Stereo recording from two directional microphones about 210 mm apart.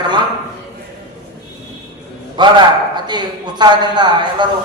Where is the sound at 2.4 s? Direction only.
20° right (ahead or behind).